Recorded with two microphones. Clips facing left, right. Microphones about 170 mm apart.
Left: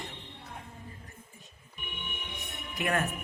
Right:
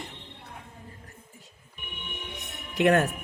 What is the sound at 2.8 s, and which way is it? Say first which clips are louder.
Speech: right 9 dB; 75° right (ahead or behind).